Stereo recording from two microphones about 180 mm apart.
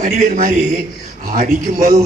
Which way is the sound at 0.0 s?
50° right (ahead or behind).